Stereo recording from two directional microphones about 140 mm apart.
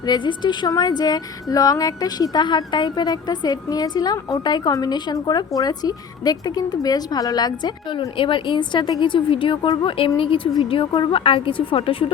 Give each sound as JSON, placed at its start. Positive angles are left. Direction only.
{"t": 0.0, "sound": "a woman's voice", "side_deg": 30}